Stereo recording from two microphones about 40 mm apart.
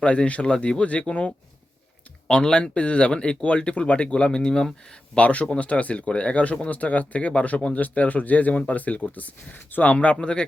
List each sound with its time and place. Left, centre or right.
0.0 s speech: left
0.4 s speech: centre
5.1 s speech: left
10.2 s speech: left